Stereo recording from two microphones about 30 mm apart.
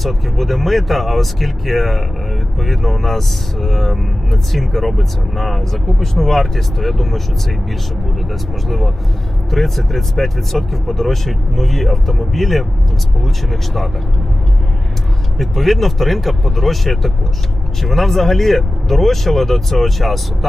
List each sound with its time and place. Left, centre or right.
0.0 s speech: centre
8.6 s speech: centre
15.4 s speech: centre